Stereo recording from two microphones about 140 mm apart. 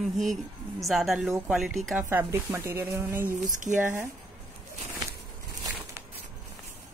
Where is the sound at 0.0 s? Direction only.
Centre (ahead or behind).